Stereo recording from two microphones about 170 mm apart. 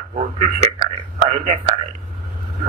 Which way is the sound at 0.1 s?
40° right (ahead or behind).